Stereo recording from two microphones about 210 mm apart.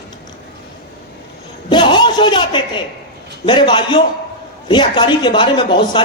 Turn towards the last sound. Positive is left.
turn(degrees=25)  # may be behind; listen again after turning